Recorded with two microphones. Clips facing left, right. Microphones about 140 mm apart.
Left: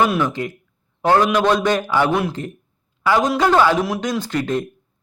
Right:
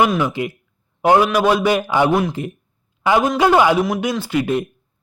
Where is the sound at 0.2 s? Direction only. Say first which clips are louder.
Right 1 dB; 10° right (ahead or behind).